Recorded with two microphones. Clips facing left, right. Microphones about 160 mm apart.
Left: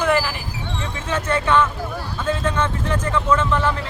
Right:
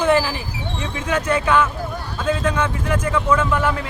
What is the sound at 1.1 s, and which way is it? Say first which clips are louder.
A man's voice: right 1 dB; 10° right (ahead or behind).